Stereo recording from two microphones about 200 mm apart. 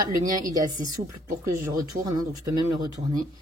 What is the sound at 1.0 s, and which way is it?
Speech, 35° right (ahead or behind).